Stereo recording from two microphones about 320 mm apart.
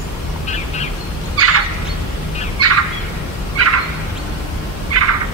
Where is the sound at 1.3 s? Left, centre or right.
Right.